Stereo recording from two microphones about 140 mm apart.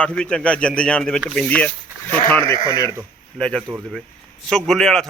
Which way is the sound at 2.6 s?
30° left (ahead or behind).